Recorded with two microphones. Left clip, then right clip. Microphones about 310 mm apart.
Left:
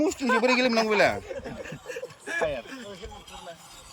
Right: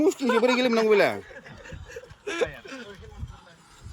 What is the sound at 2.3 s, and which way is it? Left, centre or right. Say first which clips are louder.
Speech: even; centre.